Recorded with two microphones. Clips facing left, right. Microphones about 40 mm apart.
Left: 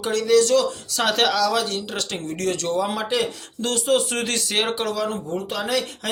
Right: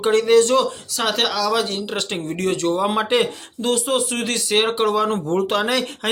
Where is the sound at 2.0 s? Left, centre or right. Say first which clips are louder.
Right 3 dB; centre.